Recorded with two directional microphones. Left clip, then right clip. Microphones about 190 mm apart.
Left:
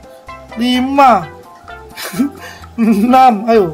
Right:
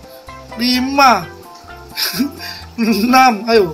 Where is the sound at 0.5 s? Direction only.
50° left (ahead or behind).